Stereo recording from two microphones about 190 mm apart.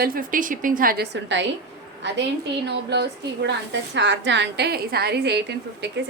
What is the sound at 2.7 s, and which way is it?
A woman's voice, 60° right (ahead or behind).